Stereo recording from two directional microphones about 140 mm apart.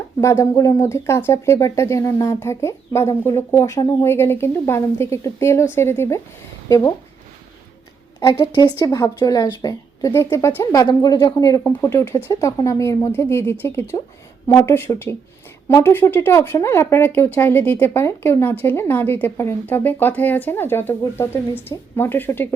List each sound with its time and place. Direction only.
0.2 s a woman's voice: 20° left (ahead or behind)
8.2 s a woman's voice: 30° left (ahead or behind)